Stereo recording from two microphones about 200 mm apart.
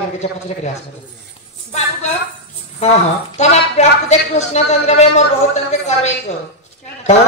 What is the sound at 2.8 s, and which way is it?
A woman's voice, 35° left (ahead or behind).